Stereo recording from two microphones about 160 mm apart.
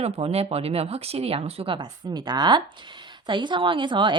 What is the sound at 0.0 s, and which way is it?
A woman's voice, 40° right (ahead or behind).